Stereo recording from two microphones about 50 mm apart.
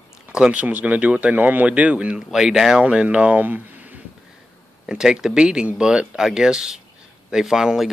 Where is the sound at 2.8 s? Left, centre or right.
Right.